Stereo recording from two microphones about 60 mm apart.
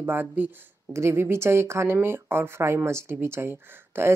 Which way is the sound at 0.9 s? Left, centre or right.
Right.